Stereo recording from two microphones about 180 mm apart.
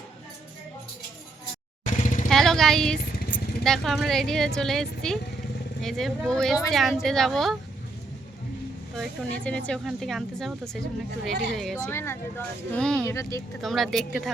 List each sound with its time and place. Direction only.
2.0 s vehicle: 40° left (ahead or behind)
2.3 s speech: centre (ahead or behind)
9.0 s speech: 5° left (ahead or behind)
11.5 s speech: centre (ahead or behind)
11.9 s speech: 15° left (ahead or behind)
13.1 s speech: 15° left (ahead or behind)
13.6 s speech: centre (ahead or behind)